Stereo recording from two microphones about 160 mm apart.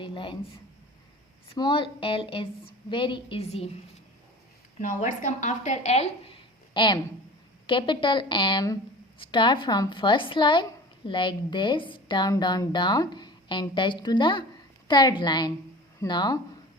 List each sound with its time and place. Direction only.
0.0 s a sound: 30° left (ahead or behind)
1.5 s a woman's voice: 30° left (ahead or behind)
4.8 s a woman's voice: 55° left (ahead or behind); by 16.4 s 25° left (ahead or behind)